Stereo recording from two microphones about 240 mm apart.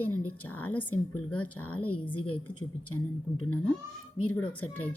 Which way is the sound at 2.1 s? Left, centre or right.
Left.